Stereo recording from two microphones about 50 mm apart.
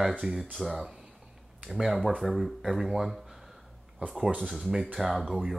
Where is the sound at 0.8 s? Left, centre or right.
Centre.